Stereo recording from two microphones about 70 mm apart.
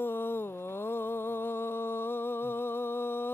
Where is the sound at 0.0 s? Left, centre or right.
Left.